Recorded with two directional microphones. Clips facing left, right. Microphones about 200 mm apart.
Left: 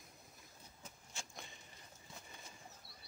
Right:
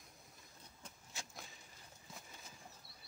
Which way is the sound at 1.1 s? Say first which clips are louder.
Even; 5° right (ahead or behind).